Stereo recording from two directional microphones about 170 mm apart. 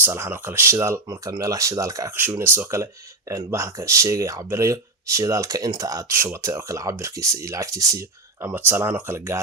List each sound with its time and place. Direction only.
0.0 s speech: 15° right (ahead or behind)